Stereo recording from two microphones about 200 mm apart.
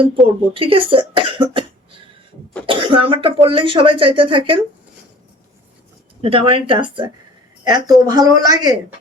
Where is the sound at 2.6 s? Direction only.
25° right (ahead or behind).